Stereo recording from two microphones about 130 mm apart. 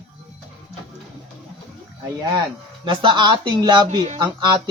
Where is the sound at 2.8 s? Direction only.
40° right (ahead or behind).